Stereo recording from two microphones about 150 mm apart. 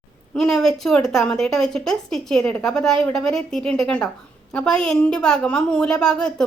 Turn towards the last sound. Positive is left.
turn(degrees=5)  # may be behind; listen again after turning